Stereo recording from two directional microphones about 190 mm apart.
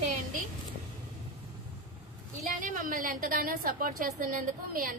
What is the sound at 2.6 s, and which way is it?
A woman's voice, 45° right (ahead or behind).